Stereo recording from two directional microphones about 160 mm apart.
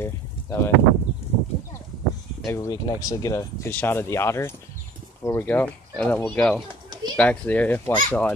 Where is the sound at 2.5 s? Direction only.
20° left (ahead or behind).